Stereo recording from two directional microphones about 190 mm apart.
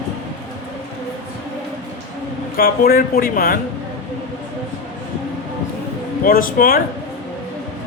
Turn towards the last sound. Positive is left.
turn(degrees=50)  # may be behind; listen again after turning